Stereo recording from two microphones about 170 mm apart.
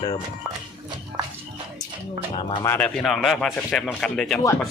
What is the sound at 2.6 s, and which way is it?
A man's voice, 10° left (ahead or behind).